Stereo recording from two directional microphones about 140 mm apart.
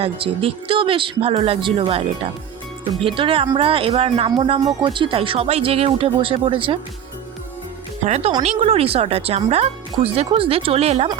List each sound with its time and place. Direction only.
0.0 s speech: 40° right (ahead or behind)
8.0 s speech: 50° right (ahead or behind)